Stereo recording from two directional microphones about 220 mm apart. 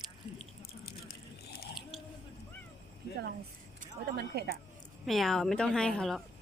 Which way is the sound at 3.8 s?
45° right (ahead or behind).